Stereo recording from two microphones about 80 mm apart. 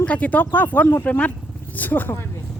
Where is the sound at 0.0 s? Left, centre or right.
Centre.